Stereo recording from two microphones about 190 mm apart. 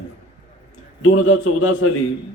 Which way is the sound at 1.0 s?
90° left.